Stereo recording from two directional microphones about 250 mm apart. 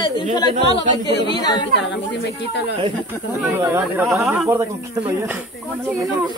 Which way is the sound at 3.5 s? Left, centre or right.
Centre.